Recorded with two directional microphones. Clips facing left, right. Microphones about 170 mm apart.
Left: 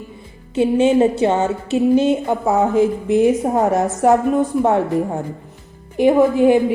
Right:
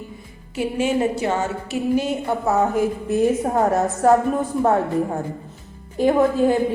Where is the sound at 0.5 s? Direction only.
25° left (ahead or behind).